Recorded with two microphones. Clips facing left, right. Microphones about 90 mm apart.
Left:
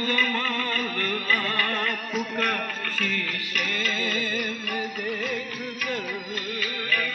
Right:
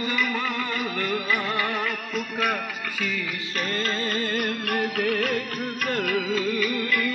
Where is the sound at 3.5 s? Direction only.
45° right (ahead or behind).